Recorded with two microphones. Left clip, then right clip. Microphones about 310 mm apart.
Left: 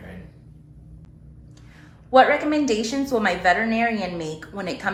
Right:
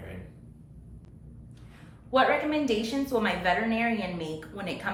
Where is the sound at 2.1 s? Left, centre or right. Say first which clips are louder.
Left 8 dB; centre.